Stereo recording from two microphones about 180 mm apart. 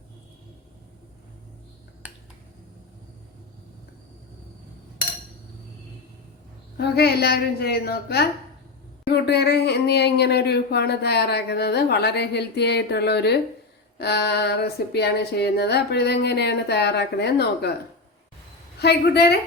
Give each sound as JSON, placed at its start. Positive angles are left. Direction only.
{"t": 2.0, "sound": "finger snapping", "side_deg": -10}
{"t": 6.7, "sound": "a woman's voice", "side_deg": 65}
{"t": 18.8, "sound": "a woman's voice", "side_deg": 65}